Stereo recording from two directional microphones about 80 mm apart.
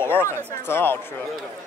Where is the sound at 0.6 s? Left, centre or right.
Left.